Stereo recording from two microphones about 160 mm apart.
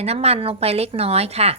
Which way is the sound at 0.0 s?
40° right (ahead or behind).